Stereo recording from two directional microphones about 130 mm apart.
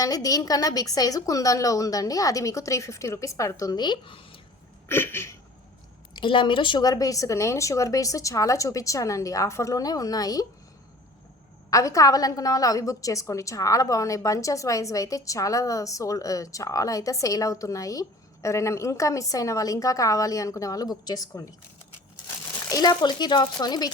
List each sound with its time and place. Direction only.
0.0 s a woman's voice: 30° left (ahead or behind)
4.9 s a woman's voice: 20° left (ahead or behind)
6.1 s a woman's voice: 40° left (ahead or behind)
11.7 s a woman's voice: 25° left (ahead or behind)
22.7 s speech: 30° left (ahead or behind)